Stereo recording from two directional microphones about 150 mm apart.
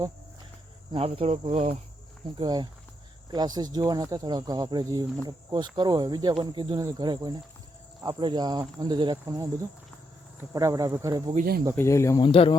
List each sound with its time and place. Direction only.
0.9 s cricket: 40° right (ahead or behind)
2.4 s speech: 30° right (ahead or behind)
10.5 s speech: 20° right (ahead or behind)
11.8 s speech: 20° left (ahead or behind)
12.2 s speech: 35° left (ahead or behind)